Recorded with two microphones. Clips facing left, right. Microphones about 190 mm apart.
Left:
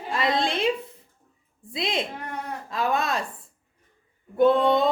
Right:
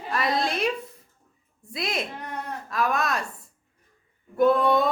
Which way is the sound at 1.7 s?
30° left (ahead or behind).